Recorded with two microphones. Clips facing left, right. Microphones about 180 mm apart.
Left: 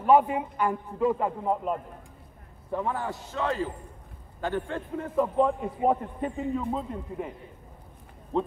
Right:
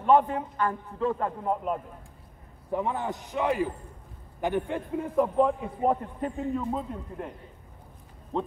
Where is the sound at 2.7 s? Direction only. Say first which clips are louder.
Right 1 dB; 20° right (ahead or behind).